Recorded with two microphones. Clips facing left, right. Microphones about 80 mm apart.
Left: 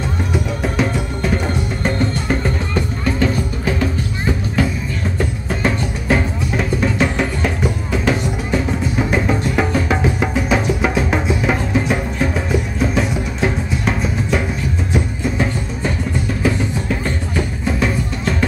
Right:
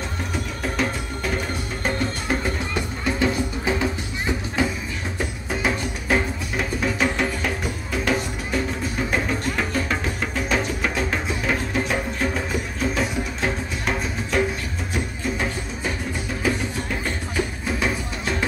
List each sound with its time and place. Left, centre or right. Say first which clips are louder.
0.3 s music: left 7 dB; centre
5.5 s music: left 3 dB; centre
17.6 s music: left 5 dB; centre